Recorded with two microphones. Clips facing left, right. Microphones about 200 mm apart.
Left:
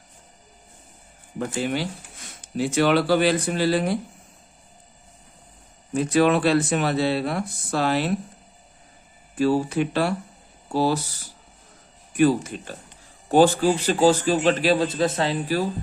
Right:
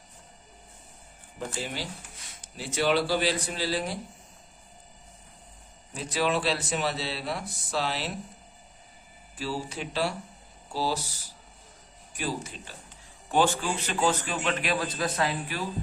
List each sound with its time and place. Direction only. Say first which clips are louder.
1.4 s speech: left 9 dB; 60° left (ahead or behind)
5.9 s speech: left 9 dB; 55° left (ahead or behind)
9.3 s speech: left 13 dB; 55° left (ahead or behind)
12.1 s speech: left 14 dB; 55° left (ahead or behind)
13.2 s a man's voice: left 9 dB; 40° left (ahead or behind)